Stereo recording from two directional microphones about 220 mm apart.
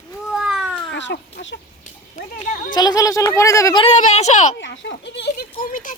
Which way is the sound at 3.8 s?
30° left (ahead or behind).